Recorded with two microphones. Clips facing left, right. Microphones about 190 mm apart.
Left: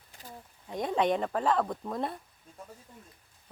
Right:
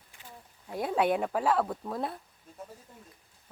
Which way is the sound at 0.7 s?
5° right (ahead or behind).